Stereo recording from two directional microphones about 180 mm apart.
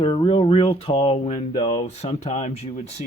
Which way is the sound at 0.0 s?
30° left (ahead or behind).